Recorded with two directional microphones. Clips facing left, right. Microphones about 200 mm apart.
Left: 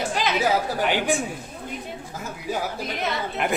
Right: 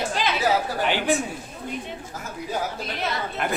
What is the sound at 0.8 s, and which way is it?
Speech, 10° left (ahead or behind).